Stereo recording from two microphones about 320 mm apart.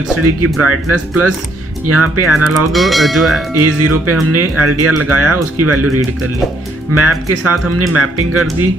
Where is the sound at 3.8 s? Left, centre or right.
Right.